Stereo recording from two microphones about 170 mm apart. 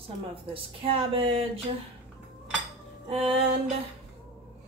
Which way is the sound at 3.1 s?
35° right (ahead or behind).